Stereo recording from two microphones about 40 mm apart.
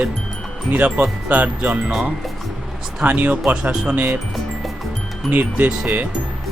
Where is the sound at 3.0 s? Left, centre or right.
Right.